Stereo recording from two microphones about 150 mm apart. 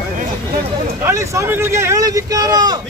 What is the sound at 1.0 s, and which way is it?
Speech, 20° right (ahead or behind).